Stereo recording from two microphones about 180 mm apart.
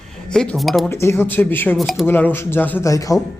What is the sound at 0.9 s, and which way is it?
Speech, 15° left (ahead or behind).